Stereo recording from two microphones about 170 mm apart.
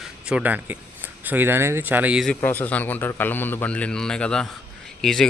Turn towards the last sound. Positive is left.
turn(degrees=5)  # may be behind; listen again after turning